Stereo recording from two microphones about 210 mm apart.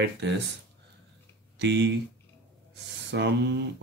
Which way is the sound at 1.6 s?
55° right (ahead or behind).